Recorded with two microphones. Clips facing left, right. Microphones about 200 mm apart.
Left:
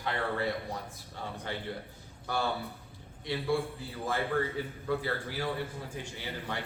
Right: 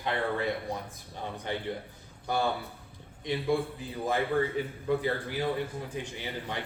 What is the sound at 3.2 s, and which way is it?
A man's voice, 20° right (ahead or behind).